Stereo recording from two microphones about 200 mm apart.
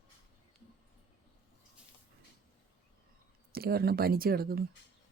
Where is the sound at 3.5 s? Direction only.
50° right (ahead or behind).